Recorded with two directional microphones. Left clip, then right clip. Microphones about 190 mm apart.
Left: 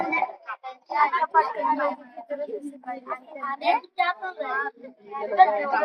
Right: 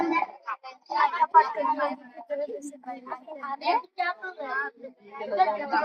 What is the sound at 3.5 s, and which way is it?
A woman's voice, 40° left (ahead or behind).